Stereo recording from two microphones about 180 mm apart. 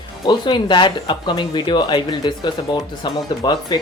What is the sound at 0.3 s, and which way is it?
Speech, 25° left (ahead or behind).